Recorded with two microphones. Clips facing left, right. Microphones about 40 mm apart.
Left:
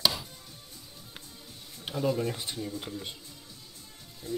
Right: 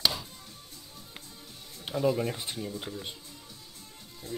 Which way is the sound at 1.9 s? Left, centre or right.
Centre.